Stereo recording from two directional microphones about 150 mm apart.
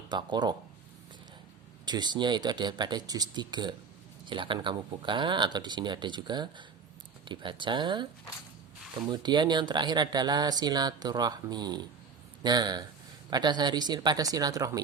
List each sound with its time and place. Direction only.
0.1 s speech: 30° right (ahead or behind)
1.8 s speech: 30° right (ahead or behind)
9.0 s speech: 30° right (ahead or behind)